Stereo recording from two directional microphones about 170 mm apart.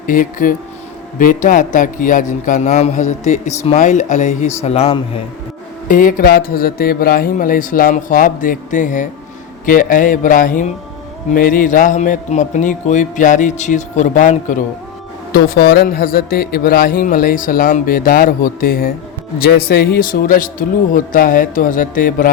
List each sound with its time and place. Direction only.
0.1 s speech: 55° left (ahead or behind); by 5.2 s 35° left (ahead or behind)
5.9 s a man's voice: 55° left (ahead or behind)
15.3 s a man's voice: 65° left (ahead or behind)